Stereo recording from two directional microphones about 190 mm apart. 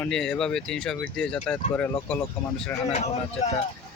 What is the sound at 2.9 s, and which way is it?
Speech, 35° left (ahead or behind).